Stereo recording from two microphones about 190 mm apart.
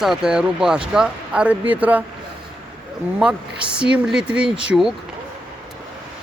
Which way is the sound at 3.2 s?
5° right (ahead or behind).